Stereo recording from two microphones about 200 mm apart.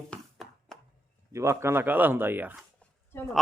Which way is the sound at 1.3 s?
15° right (ahead or behind).